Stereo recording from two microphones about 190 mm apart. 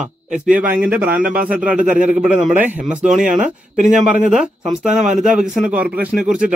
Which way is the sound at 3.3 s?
40° right (ahead or behind).